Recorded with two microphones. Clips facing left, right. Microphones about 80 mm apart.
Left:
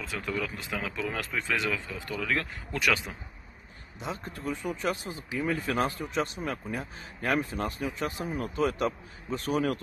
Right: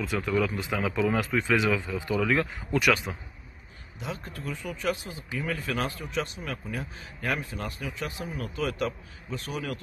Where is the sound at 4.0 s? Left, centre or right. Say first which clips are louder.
Left 1 dB; left.